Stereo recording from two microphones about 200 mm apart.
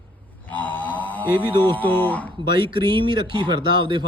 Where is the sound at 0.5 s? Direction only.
10° left (ahead or behind).